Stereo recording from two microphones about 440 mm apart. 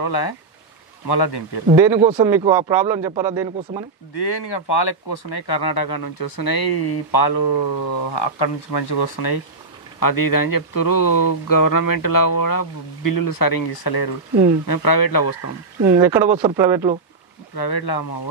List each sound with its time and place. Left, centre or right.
0.0 s speech: left
1.7 s speech: centre
4.1 s speech: left
15.9 s speech: centre
17.6 s speech: left